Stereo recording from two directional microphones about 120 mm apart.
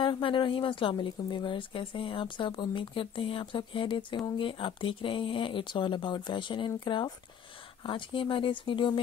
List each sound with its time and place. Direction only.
0.0 s speech: 45° left (ahead or behind)